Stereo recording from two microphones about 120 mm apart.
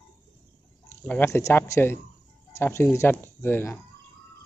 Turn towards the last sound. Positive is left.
turn(degrees=15)  # may be behind; listen again after turning